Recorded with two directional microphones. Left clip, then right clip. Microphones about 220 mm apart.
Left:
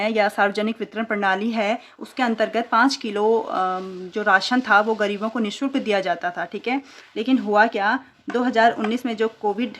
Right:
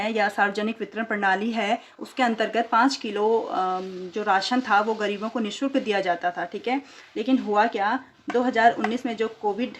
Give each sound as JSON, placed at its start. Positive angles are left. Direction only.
{"t": 0.0, "sound": "speech", "side_deg": 30}